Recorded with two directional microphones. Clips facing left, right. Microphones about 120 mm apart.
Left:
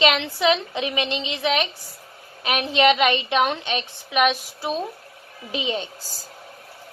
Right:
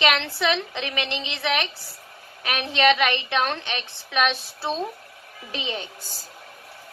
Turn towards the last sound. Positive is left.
turn(degrees=20)  # may be behind; listen again after turning